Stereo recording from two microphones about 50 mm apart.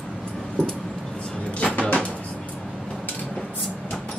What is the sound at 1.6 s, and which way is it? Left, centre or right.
Music, left.